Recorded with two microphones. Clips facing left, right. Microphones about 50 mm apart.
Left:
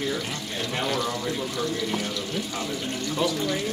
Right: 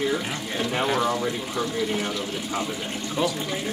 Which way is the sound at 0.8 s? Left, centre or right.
Right.